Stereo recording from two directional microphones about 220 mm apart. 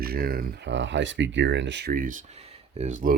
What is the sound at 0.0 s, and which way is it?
Speech, 45° right (ahead or behind).